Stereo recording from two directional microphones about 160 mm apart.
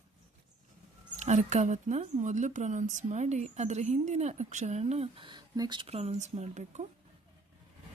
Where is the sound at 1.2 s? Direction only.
45° right (ahead or behind).